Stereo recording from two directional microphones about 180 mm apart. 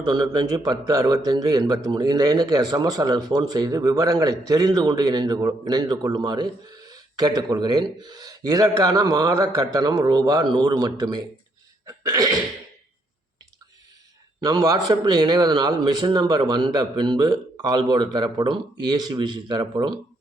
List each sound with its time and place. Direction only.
0.0 s a man's voice: 25° right (ahead or behind)
11.9 s throat clearing: 20° right (ahead or behind)
14.4 s a man's voice: 20° right (ahead or behind)